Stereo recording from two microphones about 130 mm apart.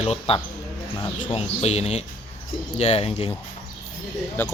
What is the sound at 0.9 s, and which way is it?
Speech, 35° left (ahead or behind).